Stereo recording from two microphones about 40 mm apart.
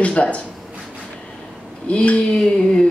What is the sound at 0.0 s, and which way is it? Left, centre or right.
Speech, left.